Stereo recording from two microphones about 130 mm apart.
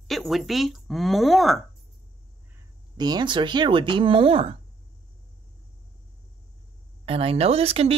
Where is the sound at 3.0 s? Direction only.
35° right (ahead or behind).